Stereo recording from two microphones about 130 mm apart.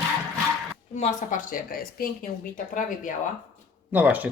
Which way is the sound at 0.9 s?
80° left.